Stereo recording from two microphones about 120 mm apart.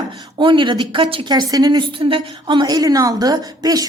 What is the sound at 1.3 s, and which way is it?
A woman's voice, 35° right (ahead or behind).